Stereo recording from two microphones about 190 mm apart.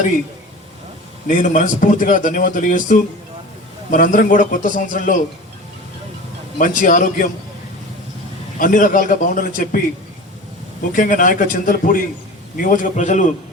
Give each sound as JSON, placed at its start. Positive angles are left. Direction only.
{"t": 1.4, "sound": "a man's voice", "side_deg": 45}
{"t": 6.6, "sound": "a man's voice", "side_deg": 45}
{"t": 8.5, "sound": "a man's voice", "side_deg": 45}
{"t": 10.9, "sound": "a man's voice", "side_deg": 45}